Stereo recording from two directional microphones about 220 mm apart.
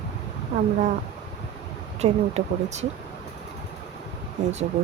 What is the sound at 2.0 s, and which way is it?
Speech, 30° right (ahead or behind).